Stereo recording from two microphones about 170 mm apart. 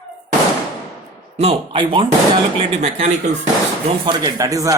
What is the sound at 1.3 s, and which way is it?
Speech, 35° right (ahead or behind).